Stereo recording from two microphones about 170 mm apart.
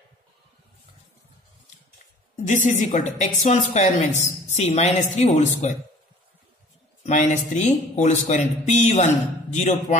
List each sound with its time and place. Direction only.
2.4 s speech: 45° left (ahead or behind)
7.0 s speech: 45° left (ahead or behind)